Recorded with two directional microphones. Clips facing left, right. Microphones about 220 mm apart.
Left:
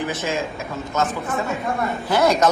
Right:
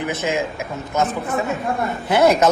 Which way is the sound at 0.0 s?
20° right (ahead or behind).